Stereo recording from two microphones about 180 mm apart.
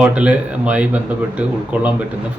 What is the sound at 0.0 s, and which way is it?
Speech, 5° right (ahead or behind).